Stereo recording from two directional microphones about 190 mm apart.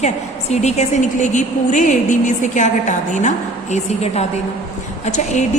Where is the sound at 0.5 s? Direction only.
35° left (ahead or behind).